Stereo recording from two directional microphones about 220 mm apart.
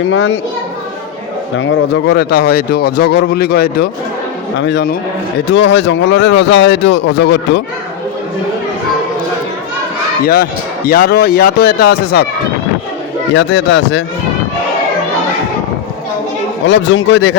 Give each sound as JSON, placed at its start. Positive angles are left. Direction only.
{"t": 0.1, "sound": "a child's voice", "side_deg": 75}
{"t": 1.5, "sound": "speech", "side_deg": 60}
{"t": 10.2, "sound": "speech", "side_deg": 45}
{"t": 13.3, "sound": "speech", "side_deg": 55}
{"t": 16.6, "sound": "speech", "side_deg": 55}